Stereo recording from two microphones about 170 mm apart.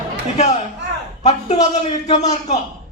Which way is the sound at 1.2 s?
40° left (ahead or behind).